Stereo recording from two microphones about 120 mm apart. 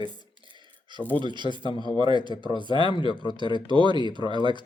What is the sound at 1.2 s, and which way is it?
Speech, 40° right (ahead or behind).